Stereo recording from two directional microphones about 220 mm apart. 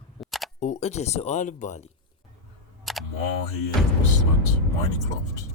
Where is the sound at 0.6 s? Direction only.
30° left (ahead or behind).